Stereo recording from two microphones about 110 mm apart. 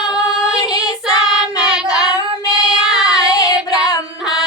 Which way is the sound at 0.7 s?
35° left (ahead or behind).